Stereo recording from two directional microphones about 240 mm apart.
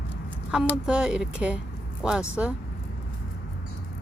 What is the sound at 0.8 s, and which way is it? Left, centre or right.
Speech, centre.